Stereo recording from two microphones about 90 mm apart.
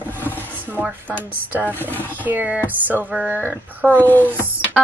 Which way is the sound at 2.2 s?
20° right (ahead or behind).